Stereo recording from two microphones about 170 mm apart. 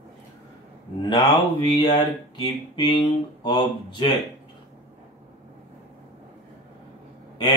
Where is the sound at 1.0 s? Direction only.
25° left (ahead or behind).